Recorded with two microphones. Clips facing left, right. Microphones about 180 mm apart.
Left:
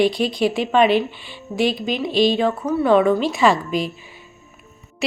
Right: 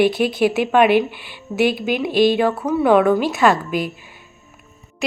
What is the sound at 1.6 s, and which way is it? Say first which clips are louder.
Speech: right 2 dB; 60° right (ahead or behind).